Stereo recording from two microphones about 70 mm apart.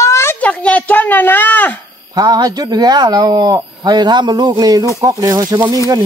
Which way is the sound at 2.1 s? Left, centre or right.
Right.